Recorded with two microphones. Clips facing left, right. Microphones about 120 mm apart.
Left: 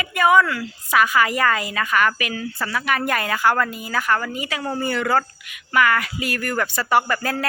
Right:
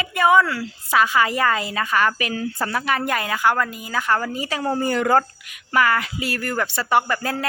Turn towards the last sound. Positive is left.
turn(degrees=-20)  # may be behind; listen again after turning